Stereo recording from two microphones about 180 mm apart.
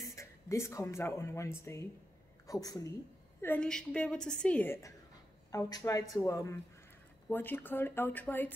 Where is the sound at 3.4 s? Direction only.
5° left (ahead or behind).